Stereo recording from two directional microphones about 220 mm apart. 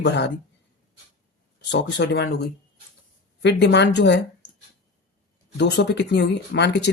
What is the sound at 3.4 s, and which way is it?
Speech, 50° left (ahead or behind).